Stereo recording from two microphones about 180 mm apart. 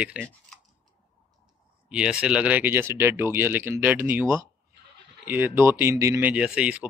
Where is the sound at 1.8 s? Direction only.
5° right (ahead or behind).